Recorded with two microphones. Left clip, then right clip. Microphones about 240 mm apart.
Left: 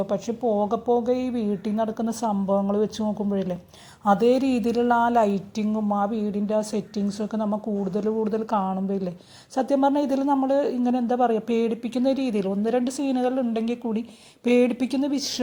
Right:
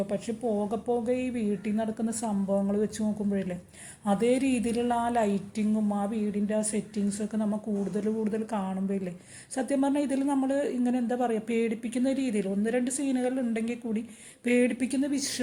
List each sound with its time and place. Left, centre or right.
0.1 s a woman's voice: centre